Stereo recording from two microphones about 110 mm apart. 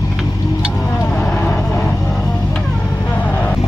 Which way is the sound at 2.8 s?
25° left (ahead or behind).